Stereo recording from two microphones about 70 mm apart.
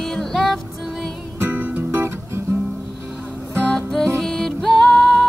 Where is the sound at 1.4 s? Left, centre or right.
Right.